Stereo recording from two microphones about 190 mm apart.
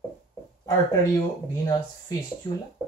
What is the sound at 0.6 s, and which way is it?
Speech, 20° left (ahead or behind).